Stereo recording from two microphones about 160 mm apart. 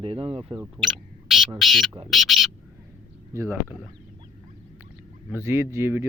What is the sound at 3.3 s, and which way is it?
Speech, 15° right (ahead or behind).